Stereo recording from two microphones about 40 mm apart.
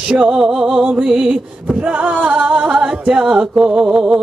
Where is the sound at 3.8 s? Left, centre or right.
Centre.